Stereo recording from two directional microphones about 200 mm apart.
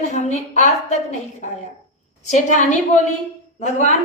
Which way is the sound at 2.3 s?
40° left (ahead or behind).